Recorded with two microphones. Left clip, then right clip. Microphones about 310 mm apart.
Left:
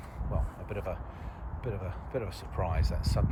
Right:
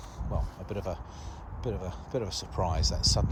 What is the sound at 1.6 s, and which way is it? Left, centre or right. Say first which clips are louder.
Speech: right 3 dB; centre.